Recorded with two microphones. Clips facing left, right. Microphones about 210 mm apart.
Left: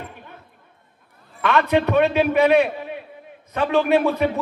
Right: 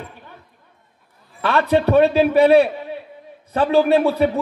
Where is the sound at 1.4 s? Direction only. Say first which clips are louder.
Right 1 dB; 35° right (ahead or behind).